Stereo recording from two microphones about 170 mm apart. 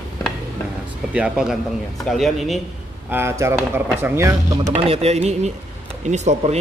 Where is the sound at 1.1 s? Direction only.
5° right (ahead or behind).